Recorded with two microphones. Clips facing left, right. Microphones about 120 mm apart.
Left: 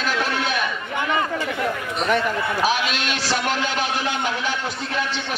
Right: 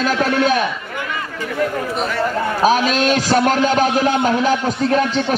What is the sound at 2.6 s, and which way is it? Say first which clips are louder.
A man's voice: right 10 dB; 40° right (ahead or behind).